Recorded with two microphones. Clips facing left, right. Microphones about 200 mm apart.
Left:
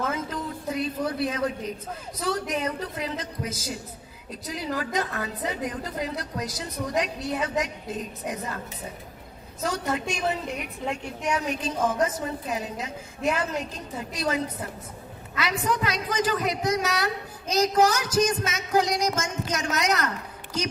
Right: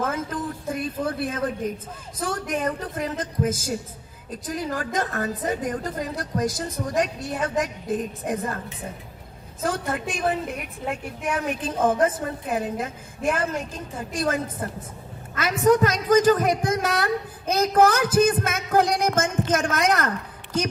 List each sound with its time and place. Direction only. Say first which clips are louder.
0.0 s a sound: right 2 dB; 50° right (ahead or behind)
2.1 s a woman's voice: right 1 dB; 50° right (ahead or behind)
9.6 s a woman's voice: right 1 dB; 50° right (ahead or behind)